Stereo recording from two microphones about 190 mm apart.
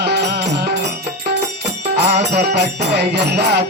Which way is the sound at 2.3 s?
60° right (ahead or behind).